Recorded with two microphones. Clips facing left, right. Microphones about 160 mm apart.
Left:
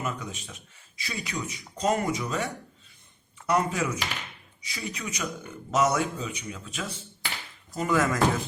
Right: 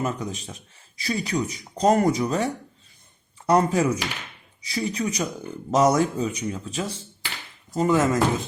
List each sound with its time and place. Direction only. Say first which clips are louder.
0.0 s speech: right 6 dB; 35° right (ahead or behind)